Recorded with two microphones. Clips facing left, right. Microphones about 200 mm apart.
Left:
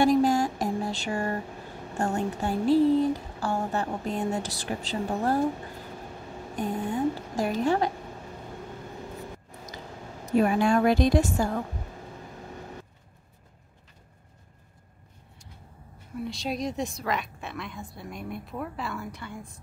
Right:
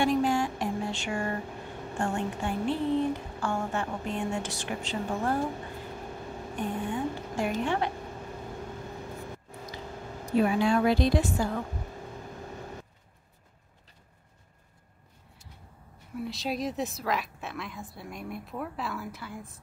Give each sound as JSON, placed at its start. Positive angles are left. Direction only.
{"t": 0.0, "sound": "a sound", "side_deg": 40}
{"t": 2.0, "sound": "a woman's voice", "side_deg": 40}
{"t": 6.5, "sound": "a woman's voice", "side_deg": 40}
{"t": 10.4, "sound": "a woman's voice", "side_deg": 50}
{"t": 16.2, "sound": "a woman's voice", "side_deg": 0}